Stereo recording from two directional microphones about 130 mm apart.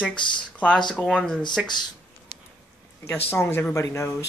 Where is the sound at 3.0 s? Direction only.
20° left (ahead or behind).